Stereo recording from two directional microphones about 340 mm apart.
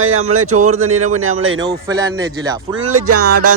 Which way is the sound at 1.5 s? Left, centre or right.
Centre.